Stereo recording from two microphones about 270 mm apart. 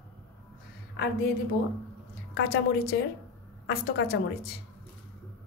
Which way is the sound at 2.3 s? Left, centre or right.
Left.